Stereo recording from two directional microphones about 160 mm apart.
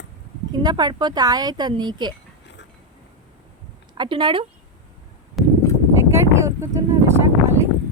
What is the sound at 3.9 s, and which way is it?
Speech, 30° right (ahead or behind).